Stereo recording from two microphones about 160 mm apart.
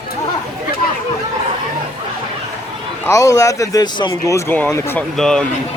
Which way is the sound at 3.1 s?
20° left (ahead or behind).